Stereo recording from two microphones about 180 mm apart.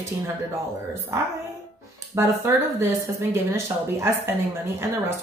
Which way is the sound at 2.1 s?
15° right (ahead or behind).